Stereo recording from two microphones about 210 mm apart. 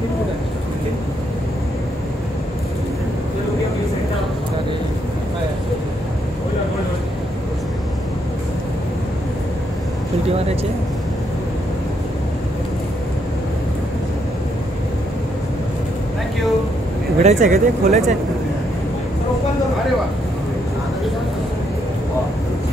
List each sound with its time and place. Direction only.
17.2 s speech: 35° right (ahead or behind)